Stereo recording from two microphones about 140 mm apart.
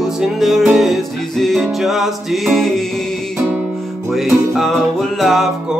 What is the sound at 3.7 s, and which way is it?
Music, centre (ahead or behind).